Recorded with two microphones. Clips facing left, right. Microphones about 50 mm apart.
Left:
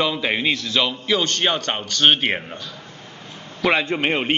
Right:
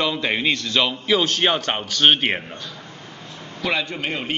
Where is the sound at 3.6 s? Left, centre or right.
Left.